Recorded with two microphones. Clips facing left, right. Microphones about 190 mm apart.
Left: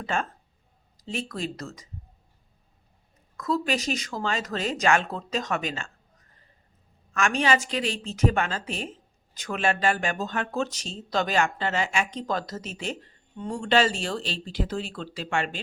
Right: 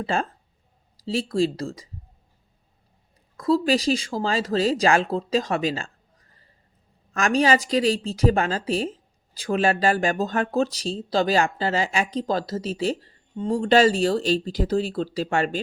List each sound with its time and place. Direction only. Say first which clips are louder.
0.0 s a woman's voice: right 4 dB; 35° right (ahead or behind)
3.3 s a woman's voice: right 6 dB; 30° right (ahead or behind)
7.1 s a woman's voice: right 4 dB; 35° right (ahead or behind)